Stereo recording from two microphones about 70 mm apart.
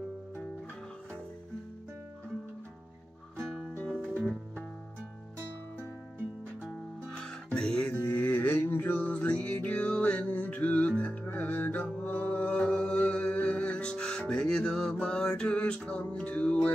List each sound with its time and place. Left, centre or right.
7.4 s music: centre
8.1 s music: left